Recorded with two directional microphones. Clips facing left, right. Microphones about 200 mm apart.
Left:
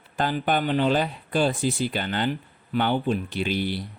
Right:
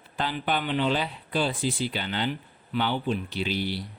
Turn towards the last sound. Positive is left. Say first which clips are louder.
# left 3 dB
turn(degrees=50)  # may be behind; listen again after turning